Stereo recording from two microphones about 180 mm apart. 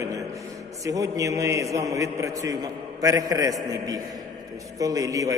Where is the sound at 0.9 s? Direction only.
20° right (ahead or behind).